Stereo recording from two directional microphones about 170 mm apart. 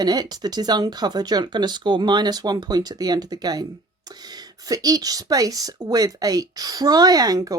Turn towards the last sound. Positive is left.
turn(degrees=-20)  # may be behind; listen again after turning